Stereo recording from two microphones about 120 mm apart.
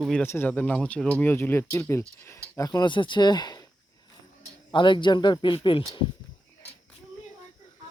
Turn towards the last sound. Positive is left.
turn(degrees=45)  # may be behind; listen again after turning